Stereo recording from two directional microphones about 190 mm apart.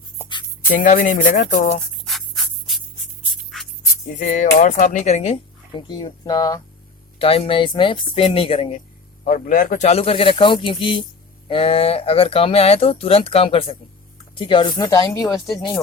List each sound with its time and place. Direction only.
0.2 s music: 10° left (ahead or behind)
0.7 s speech: 45° left (ahead or behind)
2.0 s music: centre (ahead or behind)
4.2 s speech: 40° left (ahead or behind)
9.2 s speech: 45° left (ahead or behind); by 15.3 s 20° left (ahead or behind)